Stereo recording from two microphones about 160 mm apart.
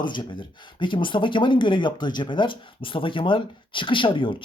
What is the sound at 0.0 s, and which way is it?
Speech, 30° left (ahead or behind).